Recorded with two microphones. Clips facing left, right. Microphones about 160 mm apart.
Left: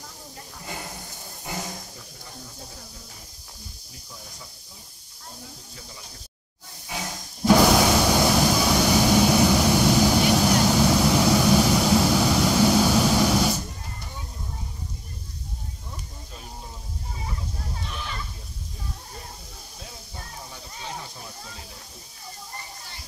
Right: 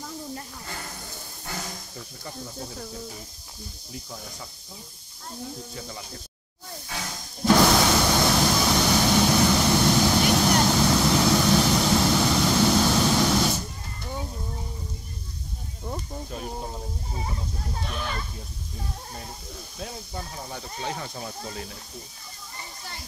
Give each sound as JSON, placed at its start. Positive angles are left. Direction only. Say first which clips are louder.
{"t": 1.4, "sound": "a sound", "louder": "left 3 dB", "side_deg": 15}
{"t": 7.4, "sound": "vehicle", "louder": "left 2 dB", "side_deg": 10}
{"t": 15.9, "sound": "snake", "louder": "right 13 dB", "side_deg": -60}